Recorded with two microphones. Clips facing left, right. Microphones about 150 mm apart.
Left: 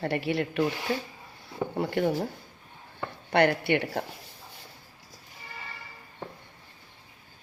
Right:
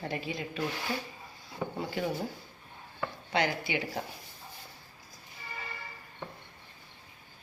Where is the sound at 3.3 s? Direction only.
65° left (ahead or behind).